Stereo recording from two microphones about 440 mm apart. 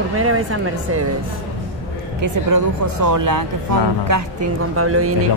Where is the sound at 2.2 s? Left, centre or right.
Right.